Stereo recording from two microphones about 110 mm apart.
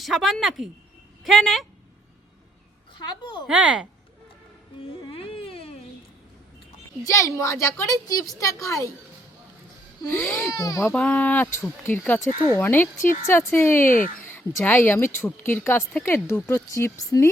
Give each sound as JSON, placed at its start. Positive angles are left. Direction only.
{"t": 0.0, "sound": "speech", "side_deg": -5}
{"t": 3.1, "sound": "speech", "side_deg": 45}
{"t": 3.4, "sound": "speech", "side_deg": -10}
{"t": 4.8, "sound": "music", "side_deg": 55}
{"t": 7.0, "sound": "speech", "side_deg": 30}
{"t": 10.1, "sound": "speech", "side_deg": 20}
{"t": 10.5, "sound": "speech", "side_deg": 35}
{"t": 10.9, "sound": "speech", "side_deg": 15}